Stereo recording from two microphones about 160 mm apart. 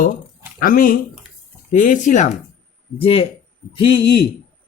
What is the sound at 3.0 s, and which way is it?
Speech, 35° left (ahead or behind).